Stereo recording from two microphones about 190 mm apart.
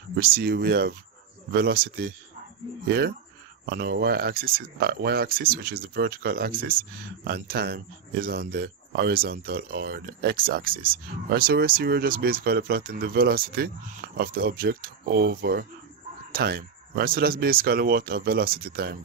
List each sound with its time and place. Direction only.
0.2 s speech: 55° right (ahead or behind)